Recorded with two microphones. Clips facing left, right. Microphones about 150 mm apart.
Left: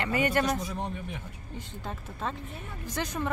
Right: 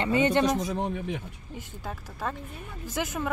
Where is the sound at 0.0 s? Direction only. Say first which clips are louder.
Right 4 dB; 25° right (ahead or behind).